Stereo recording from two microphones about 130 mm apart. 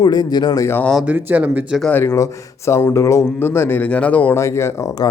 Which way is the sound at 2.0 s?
25° left (ahead or behind).